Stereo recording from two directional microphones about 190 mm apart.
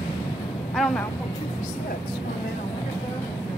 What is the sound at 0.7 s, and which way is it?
Speech, 5° left (ahead or behind).